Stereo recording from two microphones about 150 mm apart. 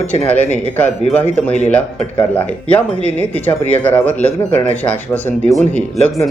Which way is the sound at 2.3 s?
10° left (ahead or behind).